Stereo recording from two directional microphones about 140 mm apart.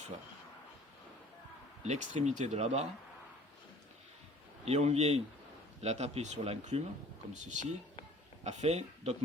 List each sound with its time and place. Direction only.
1.8 s speech: 55° right (ahead or behind)
4.6 s speech: 50° right (ahead or behind)
7.3 s speech: 60° right (ahead or behind)